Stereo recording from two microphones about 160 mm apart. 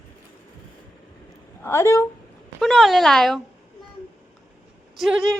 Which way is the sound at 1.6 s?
15° left (ahead or behind).